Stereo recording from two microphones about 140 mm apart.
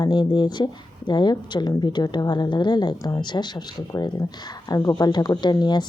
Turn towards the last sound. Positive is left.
turn(degrees=30)  # may be behind; listen again after turning